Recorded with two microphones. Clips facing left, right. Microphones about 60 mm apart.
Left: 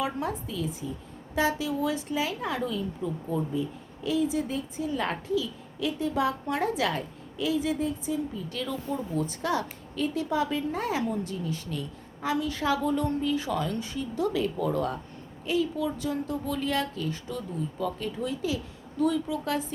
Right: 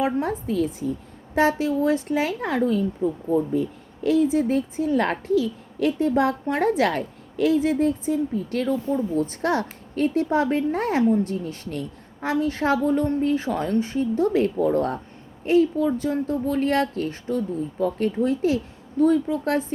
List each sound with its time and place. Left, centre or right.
0.0 s a woman's voice: right
3.5 s a woman's voice: right
8.6 s speech: right
9.2 s a woman's voice: right
17.9 s a woman's voice: right